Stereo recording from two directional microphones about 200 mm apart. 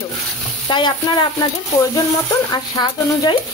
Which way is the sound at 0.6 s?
25° left (ahead or behind).